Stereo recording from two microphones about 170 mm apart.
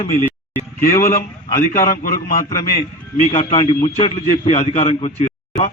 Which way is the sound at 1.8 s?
50° left (ahead or behind).